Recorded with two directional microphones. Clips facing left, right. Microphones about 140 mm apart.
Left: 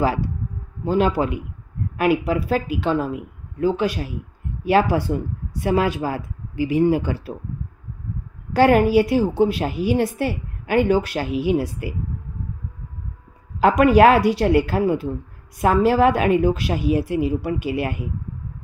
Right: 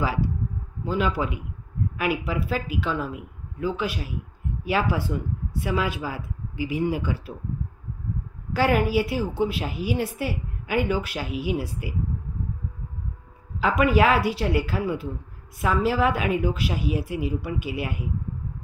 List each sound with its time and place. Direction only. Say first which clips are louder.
0.8 s a woman's voice: left 6 dB; 40° left (ahead or behind)
8.5 s a woman's voice: left 7 dB; 45° left (ahead or behind)
13.6 s a woman's voice: left 7 dB; 50° left (ahead or behind)